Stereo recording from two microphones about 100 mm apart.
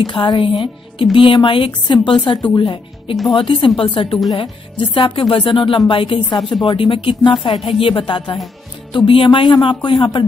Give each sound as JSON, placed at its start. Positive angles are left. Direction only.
{"t": 0.0, "sound": "speech", "side_deg": 50}
{"t": 6.3, "sound": "speech", "side_deg": 50}
{"t": 7.5, "sound": "speech", "side_deg": 70}